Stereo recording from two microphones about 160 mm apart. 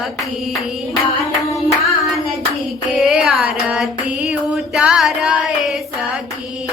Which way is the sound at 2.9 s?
Centre (ahead or behind).